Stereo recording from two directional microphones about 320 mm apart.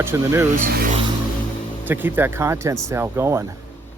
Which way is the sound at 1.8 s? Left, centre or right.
Centre.